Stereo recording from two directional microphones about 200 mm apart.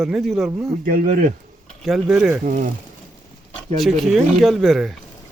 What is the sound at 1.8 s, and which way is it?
Speech, centre (ahead or behind).